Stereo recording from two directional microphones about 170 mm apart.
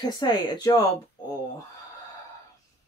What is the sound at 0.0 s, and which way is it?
Speech, 25° left (ahead or behind).